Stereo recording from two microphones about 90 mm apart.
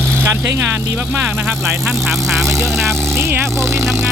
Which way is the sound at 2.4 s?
30° right (ahead or behind).